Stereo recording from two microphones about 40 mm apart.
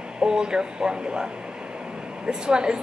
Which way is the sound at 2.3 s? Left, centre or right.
Right.